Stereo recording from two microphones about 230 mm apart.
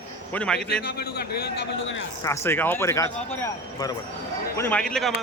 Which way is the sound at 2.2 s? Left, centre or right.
Centre.